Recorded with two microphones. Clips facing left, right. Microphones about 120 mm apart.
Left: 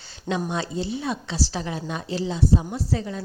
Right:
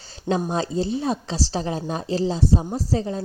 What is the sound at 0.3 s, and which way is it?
Speech, 35° right (ahead or behind).